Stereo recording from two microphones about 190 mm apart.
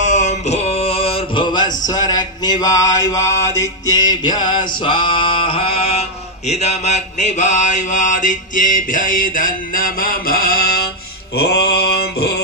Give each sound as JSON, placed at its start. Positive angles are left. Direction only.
{"t": 0.0, "sound": "a sound", "side_deg": 40}
{"t": 1.9, "sound": "male singing", "side_deg": 20}
{"t": 11.3, "sound": "mantra", "side_deg": 55}